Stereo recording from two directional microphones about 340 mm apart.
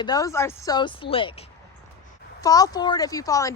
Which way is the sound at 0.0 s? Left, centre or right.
Centre.